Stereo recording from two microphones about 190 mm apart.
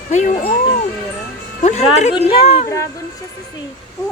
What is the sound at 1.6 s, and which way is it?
Speech, 35° left (ahead or behind).